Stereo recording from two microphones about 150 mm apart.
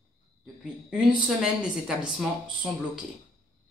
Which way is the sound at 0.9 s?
5° right (ahead or behind).